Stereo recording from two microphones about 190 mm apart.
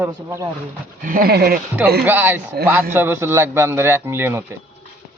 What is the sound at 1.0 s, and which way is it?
Speech, 45° right (ahead or behind).